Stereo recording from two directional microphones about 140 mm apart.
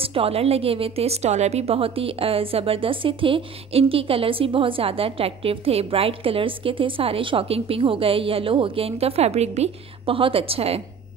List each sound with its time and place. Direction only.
0.0 s a woman's voice: 40° right (ahead or behind)